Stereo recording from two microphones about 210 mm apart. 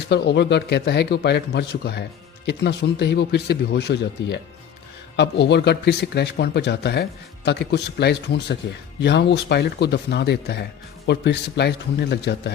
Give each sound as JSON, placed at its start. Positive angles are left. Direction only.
{"t": 0.1, "sound": "a man's voice", "side_deg": 55}